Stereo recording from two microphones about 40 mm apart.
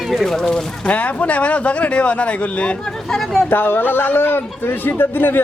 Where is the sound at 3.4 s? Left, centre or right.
Left.